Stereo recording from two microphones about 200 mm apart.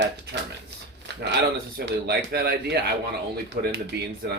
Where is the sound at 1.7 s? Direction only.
50° right (ahead or behind).